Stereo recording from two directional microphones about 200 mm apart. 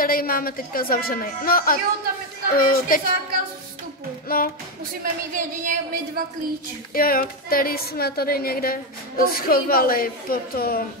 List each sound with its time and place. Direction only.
0.0 s a woman's voice: 45° left (ahead or behind)
4.3 s a woman's voice: 50° left (ahead or behind)
5.0 s speech: 40° right (ahead or behind)
6.9 s a woman's voice: 45° left (ahead or behind)